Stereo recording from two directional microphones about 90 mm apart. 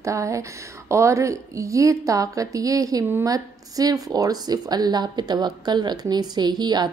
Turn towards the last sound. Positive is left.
turn(degrees=-50)  # may be behind; listen again after turning